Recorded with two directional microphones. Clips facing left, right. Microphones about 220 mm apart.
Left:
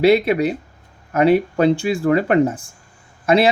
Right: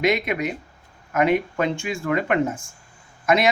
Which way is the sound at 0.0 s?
35° left (ahead or behind).